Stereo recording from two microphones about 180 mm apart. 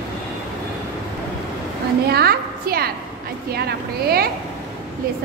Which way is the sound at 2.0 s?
60° right (ahead or behind).